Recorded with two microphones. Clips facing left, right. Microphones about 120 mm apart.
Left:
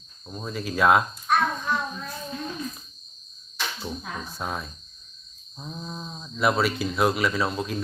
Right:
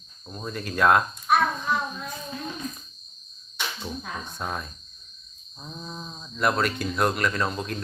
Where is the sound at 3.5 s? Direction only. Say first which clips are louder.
Left 1 dB; centre (ahead or behind).